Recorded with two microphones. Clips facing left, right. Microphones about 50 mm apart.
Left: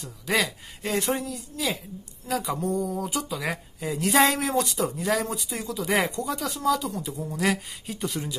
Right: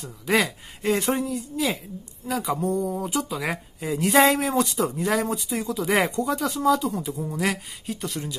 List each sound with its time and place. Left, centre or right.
0.0 s speech: centre
1.3 s speech: right
2.2 s a sound: centre
3.1 s speech: centre